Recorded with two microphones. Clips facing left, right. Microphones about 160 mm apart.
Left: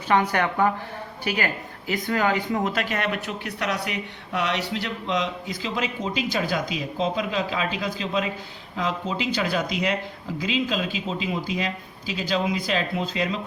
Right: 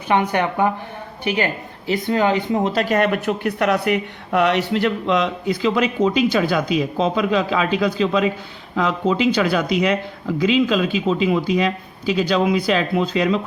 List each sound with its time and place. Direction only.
0.1 s speech: 20° right (ahead or behind)
2.9 s speech: 50° right (ahead or behind); by 13.4 s 70° right (ahead or behind)